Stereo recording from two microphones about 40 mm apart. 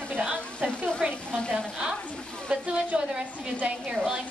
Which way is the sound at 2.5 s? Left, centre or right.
Right.